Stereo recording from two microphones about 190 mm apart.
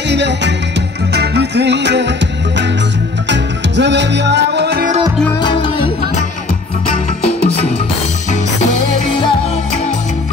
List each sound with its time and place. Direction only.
0.1 s music: 65° right (ahead or behind)
5.4 s music: 25° left (ahead or behind)